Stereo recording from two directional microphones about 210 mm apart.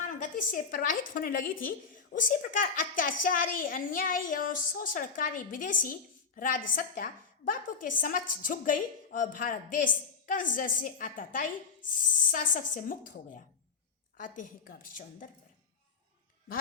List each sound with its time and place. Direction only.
0.1 s a woman's voice: 40° left (ahead or behind)